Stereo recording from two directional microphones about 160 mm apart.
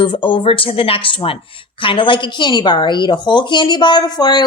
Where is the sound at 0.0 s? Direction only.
30° left (ahead or behind).